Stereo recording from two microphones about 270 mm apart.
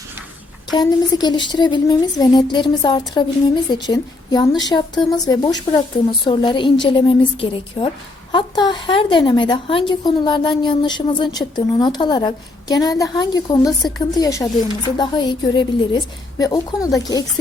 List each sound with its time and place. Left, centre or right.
0.7 s a woman's voice: centre